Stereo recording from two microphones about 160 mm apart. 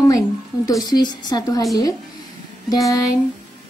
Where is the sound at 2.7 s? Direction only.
20° left (ahead or behind).